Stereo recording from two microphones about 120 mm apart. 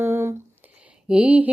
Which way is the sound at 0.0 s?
20° right (ahead or behind).